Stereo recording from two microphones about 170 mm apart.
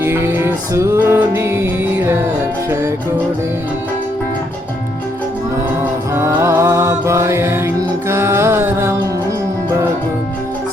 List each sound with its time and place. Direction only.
0.0 s music: 10° right (ahead or behind)
5.8 s music: 15° right (ahead or behind)